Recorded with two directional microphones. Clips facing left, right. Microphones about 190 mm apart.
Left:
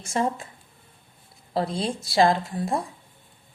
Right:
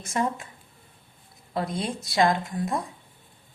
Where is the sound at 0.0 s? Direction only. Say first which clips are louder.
Left 2 dB; 30° left (ahead or behind).